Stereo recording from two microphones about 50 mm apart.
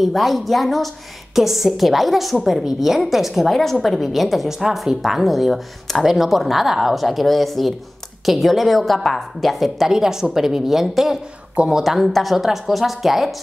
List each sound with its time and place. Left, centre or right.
0.0 s a woman's voice: centre
9.8 s a woman's voice: centre